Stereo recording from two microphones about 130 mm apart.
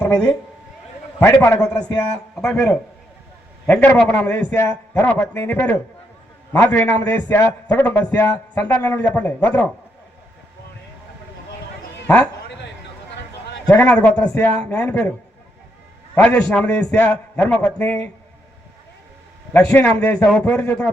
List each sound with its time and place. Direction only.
0.0 s a man's voice: 10° left (ahead or behind)
3.7 s speech: 15° left (ahead or behind)
12.0 s a man's voice: 10° left (ahead or behind)
13.7 s speech: 10° left (ahead or behind)
16.2 s speech: 10° left (ahead or behind)
19.5 s speech: 10° left (ahead or behind)